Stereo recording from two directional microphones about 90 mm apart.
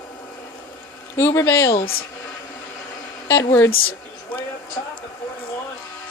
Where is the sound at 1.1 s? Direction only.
30° left (ahead or behind).